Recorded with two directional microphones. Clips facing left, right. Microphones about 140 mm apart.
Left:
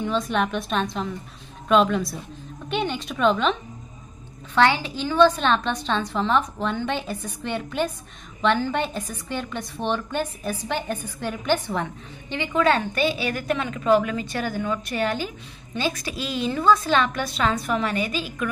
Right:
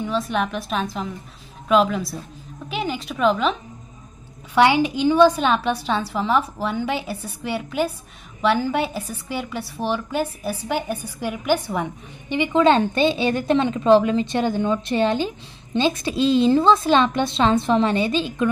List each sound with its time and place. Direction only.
0.0 s a woman's voice: centre (ahead or behind)
4.6 s a woman's voice: 15° right (ahead or behind)